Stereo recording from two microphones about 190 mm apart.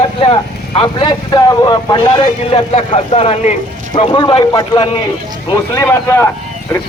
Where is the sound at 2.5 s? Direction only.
35° left (ahead or behind).